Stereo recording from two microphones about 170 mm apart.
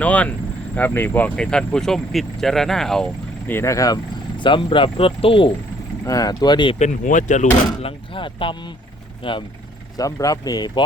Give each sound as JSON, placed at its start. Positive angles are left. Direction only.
{"t": 0.0, "sound": "speech", "side_deg": 10}
{"t": 6.1, "sound": "speech", "side_deg": 20}
{"t": 6.7, "sound": "speech", "side_deg": 45}